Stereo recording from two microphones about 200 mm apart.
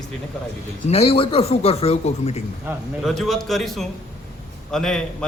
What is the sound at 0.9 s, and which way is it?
A man's voice, 30° left (ahead or behind).